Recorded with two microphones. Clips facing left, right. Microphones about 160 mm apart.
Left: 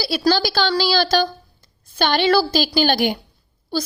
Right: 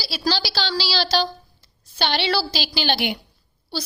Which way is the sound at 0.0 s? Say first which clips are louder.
Left 7 dB; 55° left (ahead or behind).